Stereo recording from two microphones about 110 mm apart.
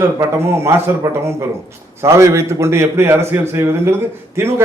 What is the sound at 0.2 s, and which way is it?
A man's voice, 25° right (ahead or behind).